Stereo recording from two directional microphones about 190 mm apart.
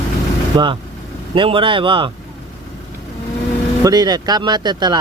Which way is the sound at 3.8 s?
20° right (ahead or behind).